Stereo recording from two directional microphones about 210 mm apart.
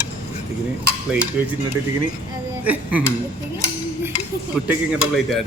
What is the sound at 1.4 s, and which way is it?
Speech, 5° right (ahead or behind).